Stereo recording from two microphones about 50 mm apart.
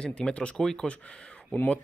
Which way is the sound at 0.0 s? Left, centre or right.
Left.